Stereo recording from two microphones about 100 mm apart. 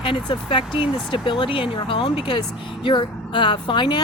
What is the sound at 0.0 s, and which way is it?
Speech, 60° left (ahead or behind).